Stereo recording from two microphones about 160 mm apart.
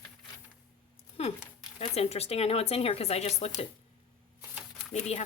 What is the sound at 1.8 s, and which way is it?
Speech, 40° left (ahead or behind).